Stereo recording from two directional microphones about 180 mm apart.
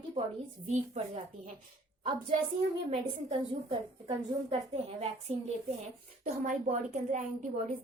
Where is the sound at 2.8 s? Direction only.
35° right (ahead or behind).